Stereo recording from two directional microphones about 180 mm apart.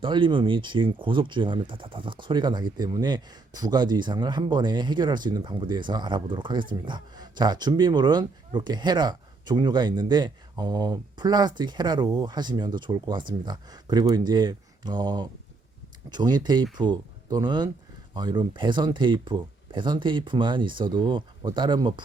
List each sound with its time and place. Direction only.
0.0 s speech: 25° right (ahead or behind)